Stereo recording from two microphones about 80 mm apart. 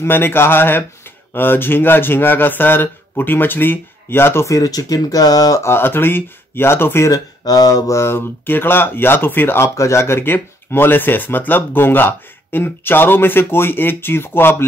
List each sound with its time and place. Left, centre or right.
0.0 s speech: left
5.6 s speech: left
7.1 s speech: left